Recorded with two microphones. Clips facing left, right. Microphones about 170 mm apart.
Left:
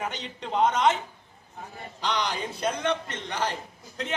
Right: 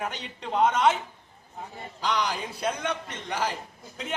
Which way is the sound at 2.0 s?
5° right (ahead or behind).